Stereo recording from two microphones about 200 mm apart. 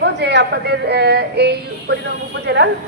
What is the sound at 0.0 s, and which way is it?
A woman's voice, 60° right (ahead or behind).